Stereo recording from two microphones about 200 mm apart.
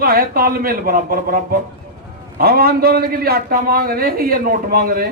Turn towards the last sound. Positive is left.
turn(degrees=-45)  # may be behind; listen again after turning